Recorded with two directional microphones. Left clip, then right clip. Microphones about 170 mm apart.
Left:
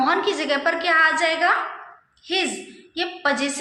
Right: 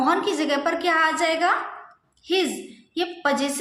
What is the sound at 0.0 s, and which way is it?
A woman's voice, 30° right (ahead or behind).